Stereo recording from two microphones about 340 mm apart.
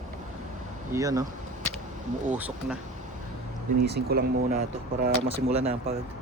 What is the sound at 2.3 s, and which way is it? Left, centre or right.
Speech, centre.